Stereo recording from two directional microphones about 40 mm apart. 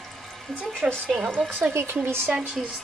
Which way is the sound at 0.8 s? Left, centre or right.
Right.